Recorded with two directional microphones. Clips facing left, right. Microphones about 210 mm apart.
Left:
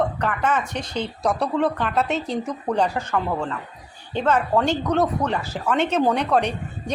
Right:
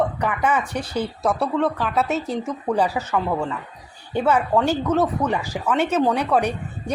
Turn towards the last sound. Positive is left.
turn(degrees=-10)  # may be behind; listen again after turning